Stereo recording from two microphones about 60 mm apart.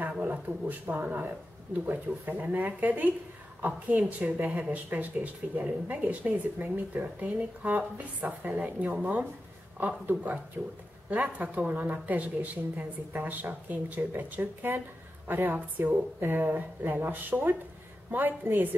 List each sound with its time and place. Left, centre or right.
0.2 s speech: right
4.2 s a woman's voice: centre